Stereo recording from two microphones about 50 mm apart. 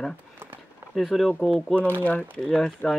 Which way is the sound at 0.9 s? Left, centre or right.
Centre.